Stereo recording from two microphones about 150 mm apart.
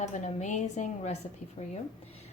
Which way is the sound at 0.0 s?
55° left (ahead or behind).